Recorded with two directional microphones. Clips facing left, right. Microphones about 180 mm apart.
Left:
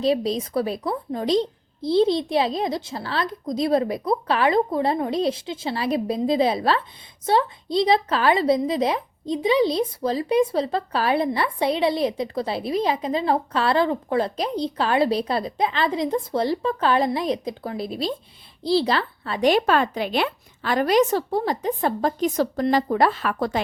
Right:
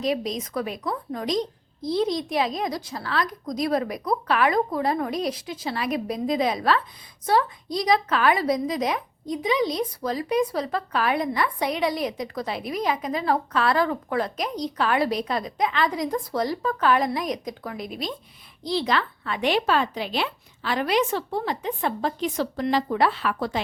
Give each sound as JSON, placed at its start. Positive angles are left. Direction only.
{"t": 0.0, "sound": "a woman's voice", "side_deg": 30}